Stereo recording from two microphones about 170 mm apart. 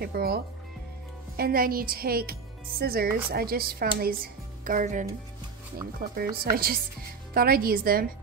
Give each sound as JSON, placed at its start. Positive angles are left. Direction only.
{"t": 0.0, "sound": "a woman's voice", "side_deg": -65}
{"t": 4.6, "sound": "speech", "side_deg": -50}
{"t": 6.1, "sound": "a woman's voice", "side_deg": -60}